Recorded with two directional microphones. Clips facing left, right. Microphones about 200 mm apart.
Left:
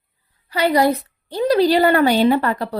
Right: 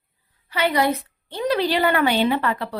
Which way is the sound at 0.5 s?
40° left (ahead or behind).